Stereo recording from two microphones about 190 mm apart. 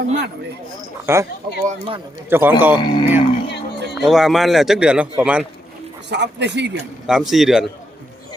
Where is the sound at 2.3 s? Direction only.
10° right (ahead or behind).